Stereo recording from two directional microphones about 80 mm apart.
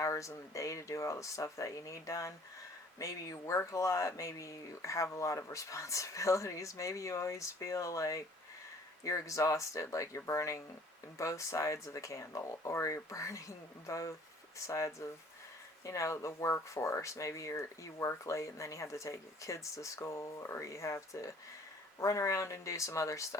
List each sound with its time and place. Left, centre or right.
0.0 s speech: left